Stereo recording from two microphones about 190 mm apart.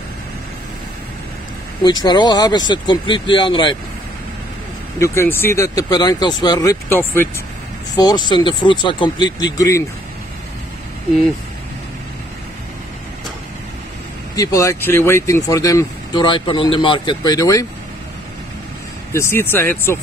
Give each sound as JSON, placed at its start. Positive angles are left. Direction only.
{"t": 1.8, "sound": "speech", "side_deg": 20}
{"t": 4.9, "sound": "speech", "side_deg": 15}
{"t": 7.9, "sound": "speech", "side_deg": 20}
{"t": 9.6, "sound": "speech", "side_deg": 15}
{"t": 14.3, "sound": "speech", "side_deg": 20}
{"t": 19.1, "sound": "speech", "side_deg": 15}